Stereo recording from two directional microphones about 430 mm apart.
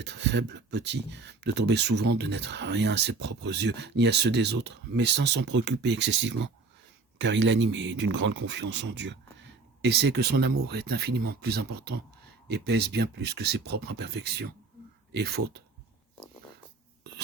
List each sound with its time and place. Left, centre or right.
0.0 s speech: right
7.2 s speech: right